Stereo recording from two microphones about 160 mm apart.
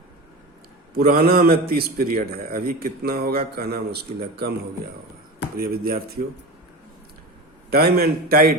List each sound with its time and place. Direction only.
0.9 s a man's voice: 70° right (ahead or behind)
5.5 s a man's voice: 70° right (ahead or behind)
7.7 s a man's voice: 75° right (ahead or behind)